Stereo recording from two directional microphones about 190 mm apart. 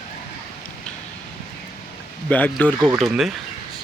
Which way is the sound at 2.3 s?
10° left (ahead or behind).